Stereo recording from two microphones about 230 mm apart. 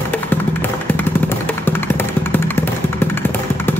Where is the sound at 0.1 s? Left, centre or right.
Centre.